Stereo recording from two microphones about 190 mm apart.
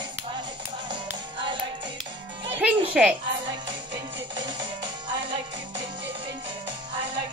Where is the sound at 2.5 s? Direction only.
5° right (ahead or behind).